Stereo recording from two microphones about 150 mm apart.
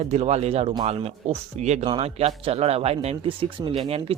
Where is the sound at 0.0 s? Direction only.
45° right (ahead or behind).